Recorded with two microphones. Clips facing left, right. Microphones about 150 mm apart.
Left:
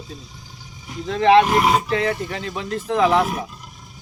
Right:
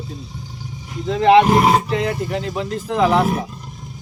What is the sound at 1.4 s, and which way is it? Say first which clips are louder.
Speech: right 3 dB; 35° right (ahead or behind).